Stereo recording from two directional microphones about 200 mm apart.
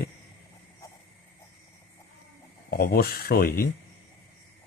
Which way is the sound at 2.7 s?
50° left (ahead or behind).